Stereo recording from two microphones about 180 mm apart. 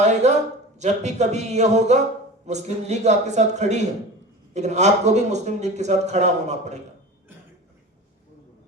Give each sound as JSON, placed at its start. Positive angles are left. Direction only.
{"t": 0.0, "sound": "a man's voice", "side_deg": -40}